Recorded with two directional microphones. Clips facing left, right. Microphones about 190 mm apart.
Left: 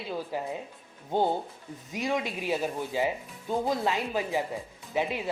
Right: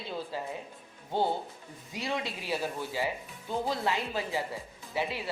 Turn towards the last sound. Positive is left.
turn(degrees=20)  # may be behind; listen again after turning